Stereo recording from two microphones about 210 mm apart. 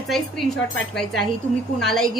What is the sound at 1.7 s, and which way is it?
Speech, centre (ahead or behind).